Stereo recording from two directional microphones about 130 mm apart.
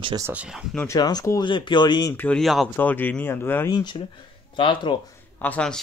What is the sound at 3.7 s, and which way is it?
Speech, 35° left (ahead or behind).